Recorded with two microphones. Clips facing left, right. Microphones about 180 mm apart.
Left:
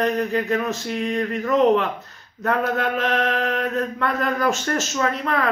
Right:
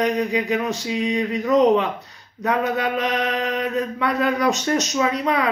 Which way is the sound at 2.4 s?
15° right (ahead or behind).